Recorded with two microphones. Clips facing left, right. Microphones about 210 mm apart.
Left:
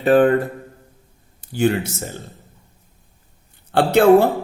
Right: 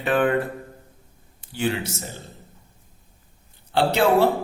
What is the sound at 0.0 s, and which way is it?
Speech, 35° left (ahead or behind).